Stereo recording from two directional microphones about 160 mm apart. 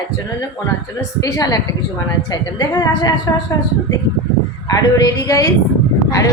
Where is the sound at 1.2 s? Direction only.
20° left (ahead or behind).